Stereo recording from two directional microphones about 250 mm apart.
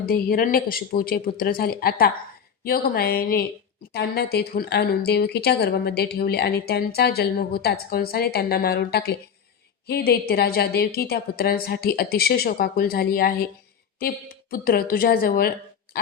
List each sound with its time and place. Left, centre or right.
0.0 s speech: left
14.5 s a woman's voice: left